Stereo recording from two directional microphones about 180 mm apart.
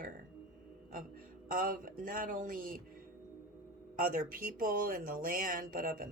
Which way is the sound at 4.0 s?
50° right (ahead or behind).